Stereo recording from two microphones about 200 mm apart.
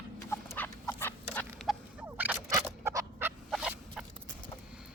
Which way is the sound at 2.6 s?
15° right (ahead or behind).